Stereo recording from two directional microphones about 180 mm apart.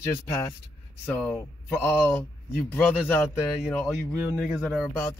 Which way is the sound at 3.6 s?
5° left (ahead or behind).